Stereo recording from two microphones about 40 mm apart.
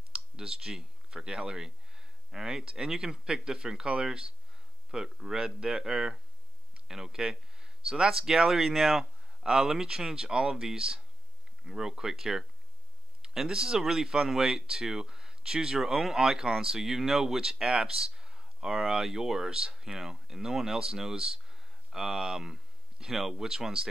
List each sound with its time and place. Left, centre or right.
0.1 s speech: centre